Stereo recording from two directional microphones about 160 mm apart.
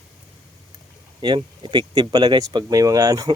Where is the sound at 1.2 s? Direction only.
30° right (ahead or behind).